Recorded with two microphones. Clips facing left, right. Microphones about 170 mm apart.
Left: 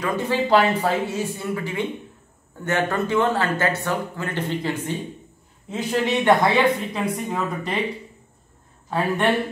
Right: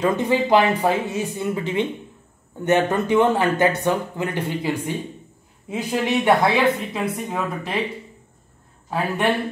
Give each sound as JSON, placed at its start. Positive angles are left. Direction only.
{"t": 0.0, "sound": "speech", "side_deg": -20}
{"t": 8.9, "sound": "speech", "side_deg": -10}